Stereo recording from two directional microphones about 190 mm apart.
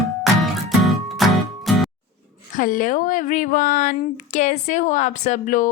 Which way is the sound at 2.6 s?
45° left (ahead or behind).